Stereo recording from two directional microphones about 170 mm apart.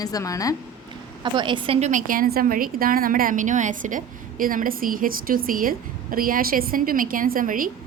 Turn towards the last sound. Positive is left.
turn(degrees=-55)  # may be behind; listen again after turning